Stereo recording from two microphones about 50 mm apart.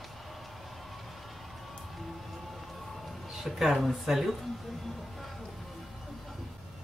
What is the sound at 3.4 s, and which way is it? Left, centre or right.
Speech, centre.